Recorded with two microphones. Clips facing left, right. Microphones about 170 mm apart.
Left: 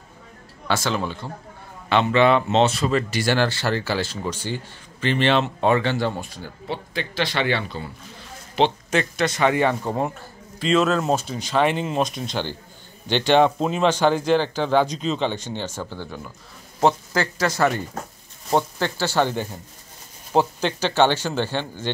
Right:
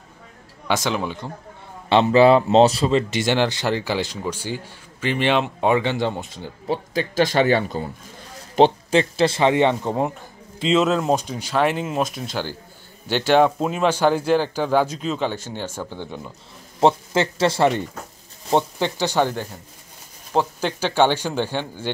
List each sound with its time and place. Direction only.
0.7 s speech: 15° right (ahead or behind)
1.9 s a man's voice: 35° right (ahead or behind)
3.0 s speech: 20° right (ahead or behind)
6.7 s speech: 40° right (ahead or behind)
8.9 s a man's voice: 30° right (ahead or behind)
20.6 s speech: 10° right (ahead or behind)